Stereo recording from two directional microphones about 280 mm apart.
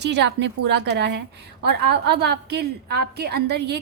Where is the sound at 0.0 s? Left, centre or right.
Right.